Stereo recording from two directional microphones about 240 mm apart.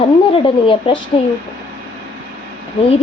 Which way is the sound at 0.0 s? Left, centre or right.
Left.